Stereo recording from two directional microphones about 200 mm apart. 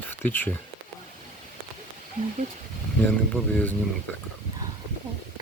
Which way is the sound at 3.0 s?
10° left (ahead or behind).